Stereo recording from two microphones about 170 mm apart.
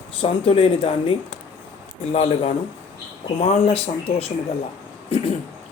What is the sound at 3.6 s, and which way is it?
Speech, 35° left (ahead or behind).